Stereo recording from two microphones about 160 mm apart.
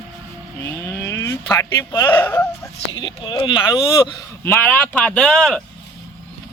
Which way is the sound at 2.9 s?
30° left (ahead or behind).